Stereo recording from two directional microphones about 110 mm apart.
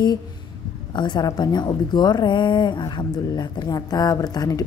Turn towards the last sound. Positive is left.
turn(degrees=35)  # may be behind; listen again after turning